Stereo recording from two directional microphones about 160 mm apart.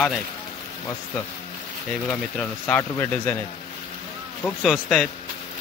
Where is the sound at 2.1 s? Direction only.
5° left (ahead or behind).